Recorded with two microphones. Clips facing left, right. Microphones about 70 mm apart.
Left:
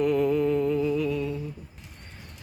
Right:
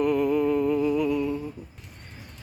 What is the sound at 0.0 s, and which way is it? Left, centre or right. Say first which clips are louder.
Humming: even; centre.